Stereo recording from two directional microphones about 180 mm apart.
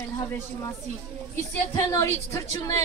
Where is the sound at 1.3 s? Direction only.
15° left (ahead or behind).